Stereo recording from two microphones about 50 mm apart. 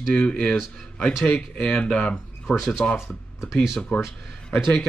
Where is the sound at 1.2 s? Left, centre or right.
Left.